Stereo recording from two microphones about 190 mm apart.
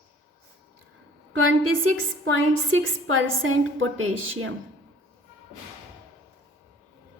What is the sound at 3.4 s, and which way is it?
Speech, 90° right.